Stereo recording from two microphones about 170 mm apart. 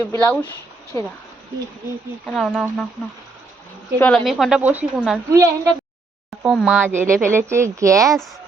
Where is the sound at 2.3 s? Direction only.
5° left (ahead or behind).